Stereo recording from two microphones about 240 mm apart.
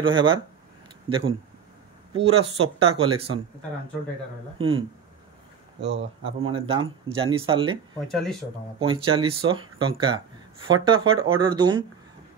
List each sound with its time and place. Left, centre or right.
0.0 s speech: right
5.8 s speech: right
6.2 s speech: right
8.1 s speech: centre
8.7 s speech: right